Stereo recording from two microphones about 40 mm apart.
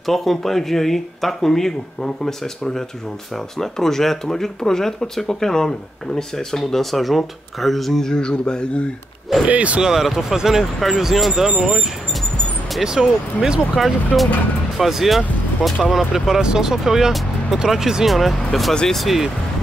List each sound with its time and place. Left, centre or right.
0.0 s speech: centre; by 8.8 s left
9.5 s speech: right
9.8 s speech: centre
12.8 s speech: centre
13.7 s speech: centre
18.1 s speech: centre